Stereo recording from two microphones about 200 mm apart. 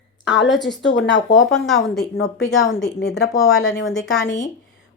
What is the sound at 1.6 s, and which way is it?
Speech, centre (ahead or behind).